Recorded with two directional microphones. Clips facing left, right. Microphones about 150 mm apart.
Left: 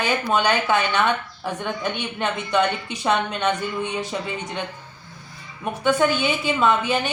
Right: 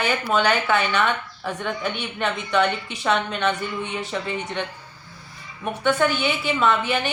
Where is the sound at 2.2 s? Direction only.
15° left (ahead or behind).